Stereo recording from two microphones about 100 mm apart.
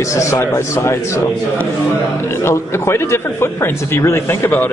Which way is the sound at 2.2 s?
25° left (ahead or behind).